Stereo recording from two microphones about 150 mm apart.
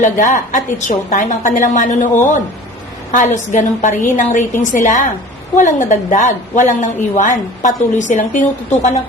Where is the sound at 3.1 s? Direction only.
55° left (ahead or behind).